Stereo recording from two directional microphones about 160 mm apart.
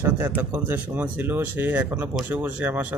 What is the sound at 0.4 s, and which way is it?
Speech, 10° right (ahead or behind).